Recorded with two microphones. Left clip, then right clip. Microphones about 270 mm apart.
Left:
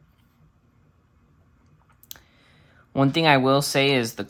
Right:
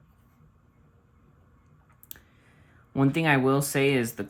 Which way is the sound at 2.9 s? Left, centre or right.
Centre.